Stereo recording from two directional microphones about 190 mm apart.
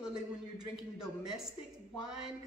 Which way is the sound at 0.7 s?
5° right (ahead or behind).